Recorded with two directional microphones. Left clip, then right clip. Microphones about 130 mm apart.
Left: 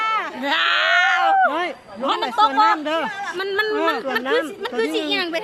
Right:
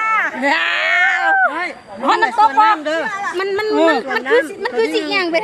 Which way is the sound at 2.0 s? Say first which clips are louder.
Right 7 dB; 5° right (ahead or behind).